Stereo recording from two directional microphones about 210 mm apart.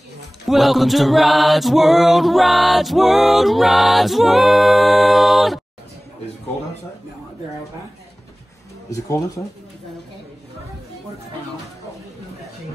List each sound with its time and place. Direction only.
0.5 s music: centre (ahead or behind)
8.9 s speech: 15° left (ahead or behind)